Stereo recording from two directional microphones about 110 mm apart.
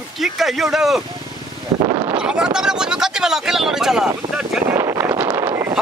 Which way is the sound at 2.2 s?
10° right (ahead or behind).